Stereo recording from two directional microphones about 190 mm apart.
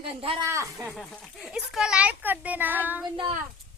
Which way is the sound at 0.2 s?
30° right (ahead or behind).